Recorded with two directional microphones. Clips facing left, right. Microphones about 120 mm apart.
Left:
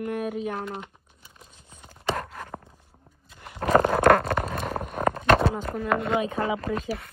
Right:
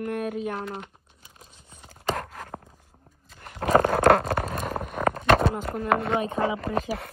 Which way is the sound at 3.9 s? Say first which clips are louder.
Even; 10° right (ahead or behind).